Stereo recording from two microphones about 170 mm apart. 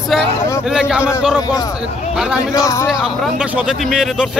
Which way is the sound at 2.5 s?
20° left (ahead or behind).